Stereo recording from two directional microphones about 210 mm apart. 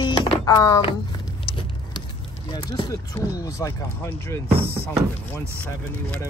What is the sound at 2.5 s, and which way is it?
Speech, 20° left (ahead or behind).